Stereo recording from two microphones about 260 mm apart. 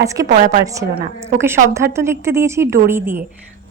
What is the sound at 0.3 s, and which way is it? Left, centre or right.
Speech, right.